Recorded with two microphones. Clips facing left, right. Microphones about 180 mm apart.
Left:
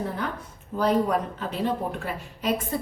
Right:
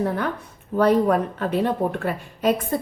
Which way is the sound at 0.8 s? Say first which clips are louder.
Right 5 dB; 60° right (ahead or behind).